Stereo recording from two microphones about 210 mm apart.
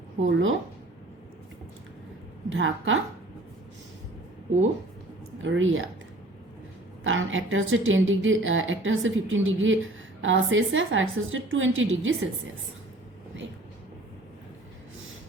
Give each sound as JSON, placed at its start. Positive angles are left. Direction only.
{"t": 0.2, "sound": "speech", "side_deg": -65}
{"t": 2.5, "sound": "a woman's voice", "side_deg": -70}
{"t": 5.4, "sound": "speech", "side_deg": -65}
{"t": 7.0, "sound": "a woman's voice", "side_deg": -70}